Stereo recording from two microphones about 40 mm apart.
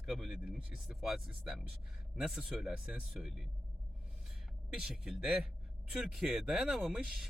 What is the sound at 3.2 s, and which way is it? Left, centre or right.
Speech, right.